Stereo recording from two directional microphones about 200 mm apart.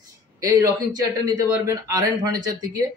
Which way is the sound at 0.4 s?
15° right (ahead or behind).